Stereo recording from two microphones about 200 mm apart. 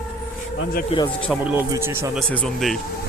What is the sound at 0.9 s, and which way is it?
Speech, 30° left (ahead or behind).